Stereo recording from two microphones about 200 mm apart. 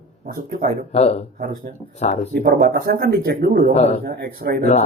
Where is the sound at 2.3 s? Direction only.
50° right (ahead or behind).